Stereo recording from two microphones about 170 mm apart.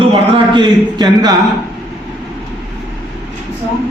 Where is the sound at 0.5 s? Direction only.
25° right (ahead or behind).